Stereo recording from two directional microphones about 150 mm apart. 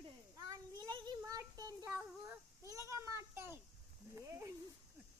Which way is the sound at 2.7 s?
20° right (ahead or behind).